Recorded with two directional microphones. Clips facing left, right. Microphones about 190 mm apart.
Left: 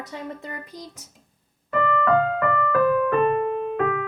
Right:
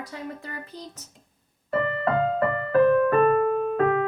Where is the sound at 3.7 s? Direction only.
35° right (ahead or behind).